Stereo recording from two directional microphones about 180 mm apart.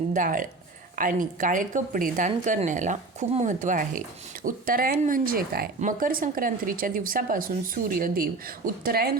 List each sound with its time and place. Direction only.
0.1 s speech: 45° right (ahead or behind)